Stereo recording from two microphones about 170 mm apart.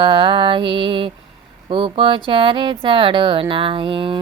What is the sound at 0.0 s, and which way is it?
Music, 30° right (ahead or behind).